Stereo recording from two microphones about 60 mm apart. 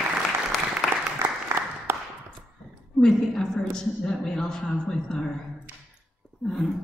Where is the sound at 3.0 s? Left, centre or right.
Centre.